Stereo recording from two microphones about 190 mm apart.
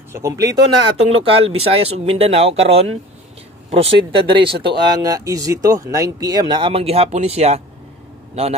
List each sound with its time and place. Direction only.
0.1 s speech: 15° right (ahead or behind)
0.9 s speech: 30° right (ahead or behind)